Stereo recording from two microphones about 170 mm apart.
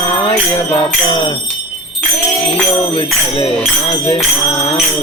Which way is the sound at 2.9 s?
30° left (ahead or behind).